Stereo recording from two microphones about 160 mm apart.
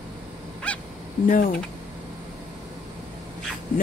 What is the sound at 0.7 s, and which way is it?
Honk, 10° left (ahead or behind).